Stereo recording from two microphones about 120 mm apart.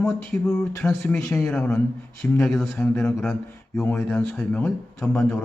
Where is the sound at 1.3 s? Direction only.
5° left (ahead or behind).